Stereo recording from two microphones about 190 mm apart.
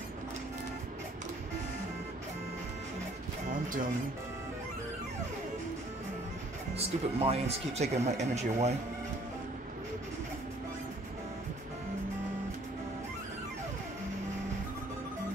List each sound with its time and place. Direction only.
7.2 s speech: 30° right (ahead or behind)